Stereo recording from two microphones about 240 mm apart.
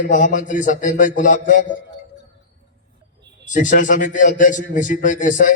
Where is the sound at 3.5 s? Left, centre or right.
Left.